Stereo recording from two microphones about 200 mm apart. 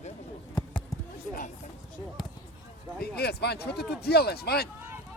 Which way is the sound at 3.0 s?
55° left (ahead or behind).